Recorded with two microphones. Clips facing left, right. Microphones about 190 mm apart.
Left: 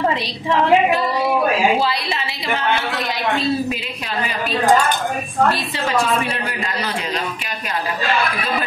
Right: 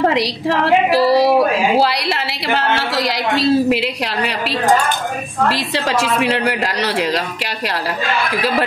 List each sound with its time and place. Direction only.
0.1 s a woman's voice: 90° right
1.8 s a woman's voice: 75° right (ahead or behind)
5.5 s a woman's voice: 90° right